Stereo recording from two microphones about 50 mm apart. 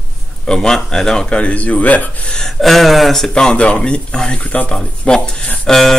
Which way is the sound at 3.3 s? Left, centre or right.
Centre.